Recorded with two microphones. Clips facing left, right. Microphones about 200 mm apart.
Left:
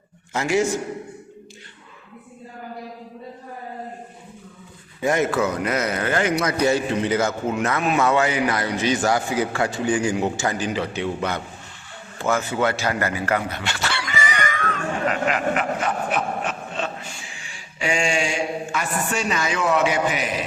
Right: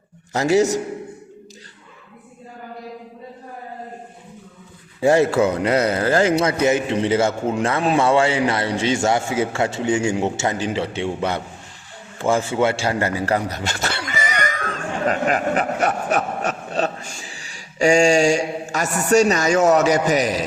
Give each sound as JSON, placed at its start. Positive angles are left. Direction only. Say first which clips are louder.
{"t": 0.3, "sound": "a man's voice", "louder": "right 4 dB", "side_deg": -35}
{"t": 4.9, "sound": "a man's voice", "louder": "right 5 dB", "side_deg": -30}
{"t": 12.2, "sound": "a sound", "louder": "right 3 dB", "side_deg": -30}
{"t": 18.9, "sound": "a man's voice", "louder": "right 11 dB", "side_deg": -40}